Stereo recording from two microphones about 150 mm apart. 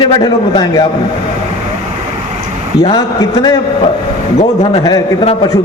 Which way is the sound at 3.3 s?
30° left (ahead or behind).